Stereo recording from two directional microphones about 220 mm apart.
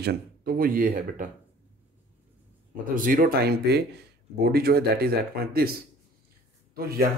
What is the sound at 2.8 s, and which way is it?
Speech, 40° right (ahead or behind).